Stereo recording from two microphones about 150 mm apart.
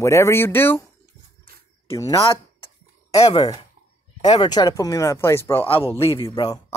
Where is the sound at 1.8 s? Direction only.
20° left (ahead or behind).